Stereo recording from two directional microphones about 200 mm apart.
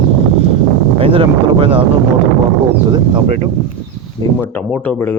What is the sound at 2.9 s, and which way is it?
Speech, 25° right (ahead or behind).